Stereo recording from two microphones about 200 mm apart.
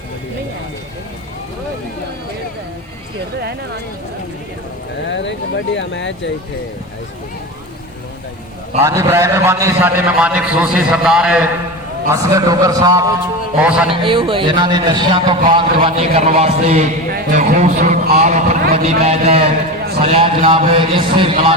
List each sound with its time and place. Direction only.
5.0 s speech: 65° left (ahead or behind)
8.8 s a man's voice: 15° right (ahead or behind)
12.1 s a man's voice: 15° right (ahead or behind)
13.6 s a man's voice: 5° right (ahead or behind)
13.9 s a man's voice: 25° right (ahead or behind)